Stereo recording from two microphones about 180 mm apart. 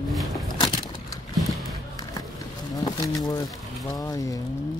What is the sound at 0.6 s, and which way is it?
Keys jangling, 20° left (ahead or behind).